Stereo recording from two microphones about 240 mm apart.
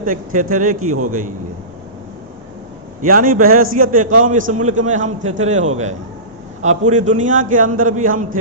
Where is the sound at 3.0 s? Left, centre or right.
Right.